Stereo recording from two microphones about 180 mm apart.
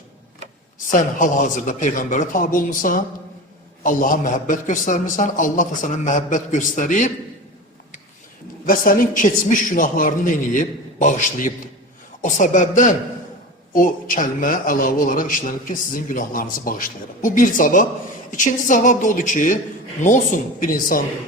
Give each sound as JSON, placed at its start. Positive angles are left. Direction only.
{"t": 0.9, "sound": "speech", "side_deg": 45}
{"t": 8.6, "sound": "speech", "side_deg": 50}